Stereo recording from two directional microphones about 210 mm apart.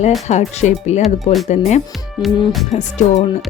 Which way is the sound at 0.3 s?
35° left (ahead or behind).